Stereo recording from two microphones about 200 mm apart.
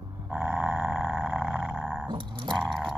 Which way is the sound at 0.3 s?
5° right (ahead or behind).